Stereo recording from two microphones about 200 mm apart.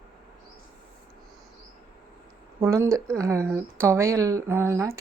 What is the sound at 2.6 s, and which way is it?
Speech, 15° right (ahead or behind).